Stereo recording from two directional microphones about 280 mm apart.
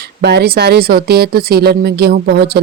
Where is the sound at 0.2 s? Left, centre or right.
Right.